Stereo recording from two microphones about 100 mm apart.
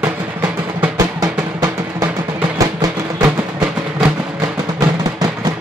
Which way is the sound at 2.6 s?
35° right (ahead or behind).